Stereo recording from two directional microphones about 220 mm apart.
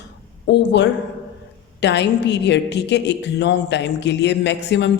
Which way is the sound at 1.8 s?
50° left (ahead or behind).